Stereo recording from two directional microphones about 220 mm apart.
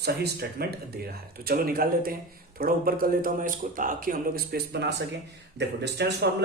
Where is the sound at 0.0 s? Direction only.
45° right (ahead or behind).